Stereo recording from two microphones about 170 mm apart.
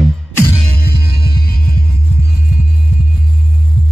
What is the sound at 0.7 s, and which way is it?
Music, 70° left (ahead or behind).